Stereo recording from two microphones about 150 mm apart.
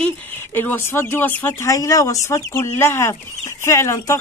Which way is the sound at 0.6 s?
15° left (ahead or behind).